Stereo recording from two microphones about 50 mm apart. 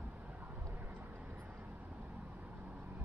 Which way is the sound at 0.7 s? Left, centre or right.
Right.